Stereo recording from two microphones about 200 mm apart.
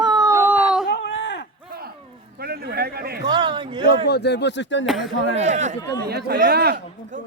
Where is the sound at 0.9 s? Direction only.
60° left (ahead or behind).